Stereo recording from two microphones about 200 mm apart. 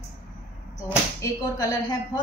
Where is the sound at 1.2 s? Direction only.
20° left (ahead or behind).